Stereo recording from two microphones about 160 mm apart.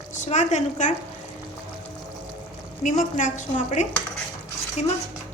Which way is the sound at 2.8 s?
50° left (ahead or behind).